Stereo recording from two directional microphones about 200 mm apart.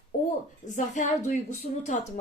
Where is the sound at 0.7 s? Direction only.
35° left (ahead or behind).